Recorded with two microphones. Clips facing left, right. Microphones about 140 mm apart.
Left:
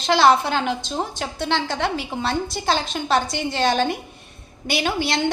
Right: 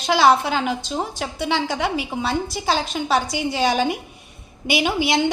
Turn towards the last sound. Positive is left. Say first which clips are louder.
# right 3 dB
turn(degrees=-10)  # may be behind; listen again after turning